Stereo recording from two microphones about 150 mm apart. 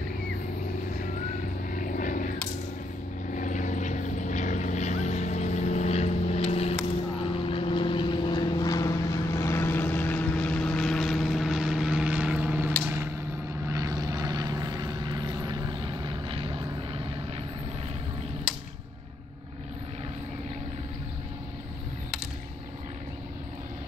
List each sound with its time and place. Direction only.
1.0 s vehicle: 60° left (ahead or behind)
3.3 s vehicle: 55° left (ahead or behind); by 16.5 s 35° right (ahead or behind)
18.5 s arrow: 5° right (ahead or behind)